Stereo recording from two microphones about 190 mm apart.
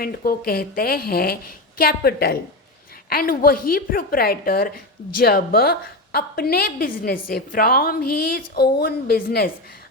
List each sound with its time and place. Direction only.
0.0 s a woman's voice: 50° left (ahead or behind)